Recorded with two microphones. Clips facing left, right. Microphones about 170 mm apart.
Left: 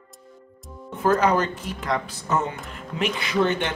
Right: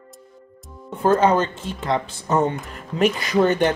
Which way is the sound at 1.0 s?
25° right (ahead or behind).